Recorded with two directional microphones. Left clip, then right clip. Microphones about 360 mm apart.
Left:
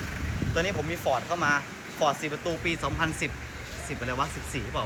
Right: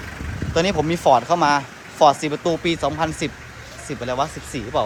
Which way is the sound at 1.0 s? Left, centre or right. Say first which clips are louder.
Right 12 dB; right.